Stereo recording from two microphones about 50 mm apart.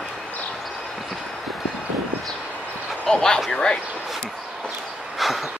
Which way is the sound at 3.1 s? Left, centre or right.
Centre.